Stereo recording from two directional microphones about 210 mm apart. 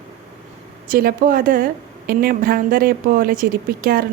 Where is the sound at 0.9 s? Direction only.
45° right (ahead or behind).